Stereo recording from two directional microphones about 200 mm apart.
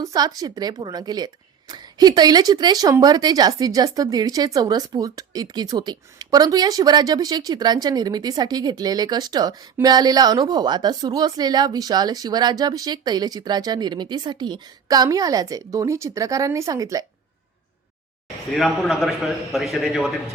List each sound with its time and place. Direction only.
0.0 s speech: 20° right (ahead or behind)
18.5 s a man's voice: centre (ahead or behind)